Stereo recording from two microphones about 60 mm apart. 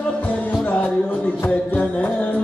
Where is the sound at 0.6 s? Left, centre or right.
Left.